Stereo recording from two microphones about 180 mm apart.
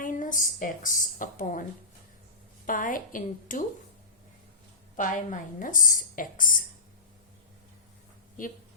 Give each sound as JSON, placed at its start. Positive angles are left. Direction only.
{"t": 0.0, "sound": "a woman's voice", "side_deg": 45}
{"t": 2.6, "sound": "a woman's voice", "side_deg": 50}
{"t": 4.9, "sound": "a woman's voice", "side_deg": 45}